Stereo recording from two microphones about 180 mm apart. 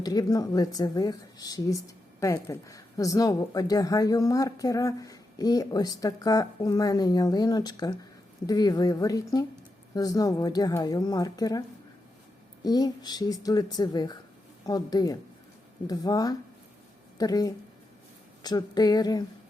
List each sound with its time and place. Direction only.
0.0 s speech: 20° left (ahead or behind)
12.6 s speech: 20° left (ahead or behind)